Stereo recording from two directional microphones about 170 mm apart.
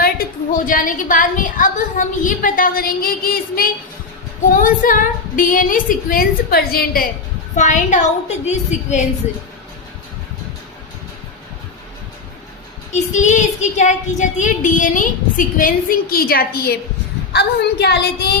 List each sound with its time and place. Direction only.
0.0 s child singing: 55° left (ahead or behind)
4.5 s a woman's voice: 50° left (ahead or behind)
7.5 s child singing: 45° left (ahead or behind)
12.9 s child singing: 45° left (ahead or behind); by 16.7 s 60° left (ahead or behind)
17.3 s a woman's voice: 70° left (ahead or behind)